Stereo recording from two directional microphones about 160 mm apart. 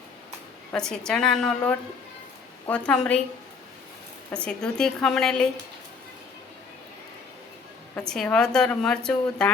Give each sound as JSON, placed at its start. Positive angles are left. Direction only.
{"t": 0.7, "sound": "a woman's voice", "side_deg": 5}
{"t": 4.3, "sound": "a woman's voice", "side_deg": 5}
{"t": 7.9, "sound": "a woman's voice", "side_deg": 5}